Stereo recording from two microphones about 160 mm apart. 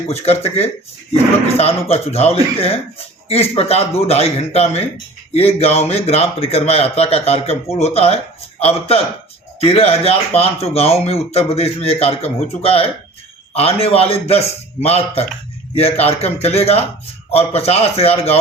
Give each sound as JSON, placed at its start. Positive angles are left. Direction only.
{"t": 0.1, "sound": "a man's voice", "side_deg": 40}